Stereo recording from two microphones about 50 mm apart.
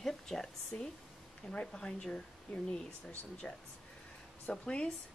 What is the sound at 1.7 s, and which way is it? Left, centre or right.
Speech, centre.